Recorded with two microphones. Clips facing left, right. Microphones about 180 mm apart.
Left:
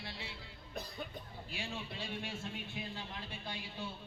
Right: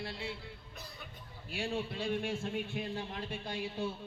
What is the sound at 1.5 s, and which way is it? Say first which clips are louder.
A man's voice: right 8 dB; 55° right (ahead or behind).